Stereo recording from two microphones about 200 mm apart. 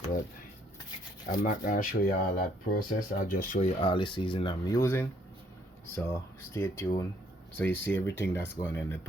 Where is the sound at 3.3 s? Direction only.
40° left (ahead or behind).